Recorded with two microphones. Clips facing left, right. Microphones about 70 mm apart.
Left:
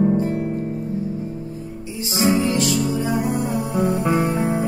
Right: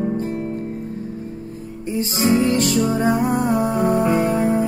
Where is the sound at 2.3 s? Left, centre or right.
Right.